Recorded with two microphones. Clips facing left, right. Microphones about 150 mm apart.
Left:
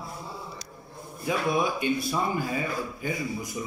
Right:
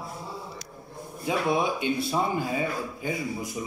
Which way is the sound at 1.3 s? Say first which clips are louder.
Right 1 dB; 25° right (ahead or behind).